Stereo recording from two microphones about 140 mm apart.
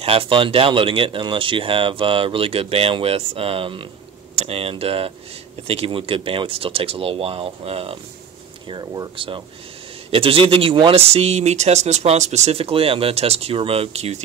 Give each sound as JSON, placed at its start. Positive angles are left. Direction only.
{"t": 0.0, "sound": "speech", "side_deg": -40}
{"t": 8.6, "sound": "speech", "side_deg": -30}